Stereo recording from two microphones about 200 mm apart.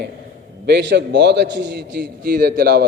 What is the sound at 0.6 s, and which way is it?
A man's voice, 55° right (ahead or behind).